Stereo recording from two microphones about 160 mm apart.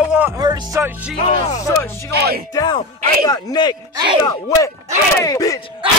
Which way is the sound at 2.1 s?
80° right.